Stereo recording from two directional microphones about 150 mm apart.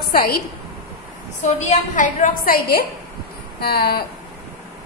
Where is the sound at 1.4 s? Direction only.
55° left (ahead or behind); by 2.8 s 75° left (ahead or behind).